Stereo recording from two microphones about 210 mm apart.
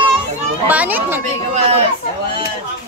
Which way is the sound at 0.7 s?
10° right (ahead or behind).